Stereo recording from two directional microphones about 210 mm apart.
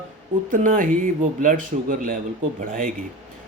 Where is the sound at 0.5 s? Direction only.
40° right (ahead or behind).